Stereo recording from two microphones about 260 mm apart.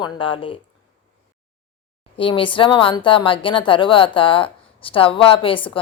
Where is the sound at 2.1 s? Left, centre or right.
Centre.